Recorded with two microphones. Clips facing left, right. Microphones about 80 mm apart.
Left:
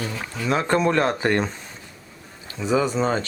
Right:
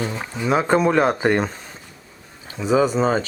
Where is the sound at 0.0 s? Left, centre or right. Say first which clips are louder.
Right 3 dB; right.